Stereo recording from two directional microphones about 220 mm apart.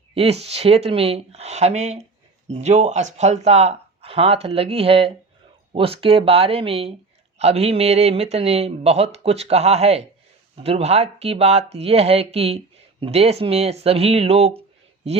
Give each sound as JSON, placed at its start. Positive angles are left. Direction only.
{"t": 0.1, "sound": "speech", "side_deg": -25}